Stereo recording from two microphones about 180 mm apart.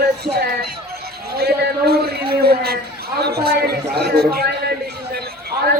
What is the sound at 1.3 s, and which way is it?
A man's voice, 60° right (ahead or behind).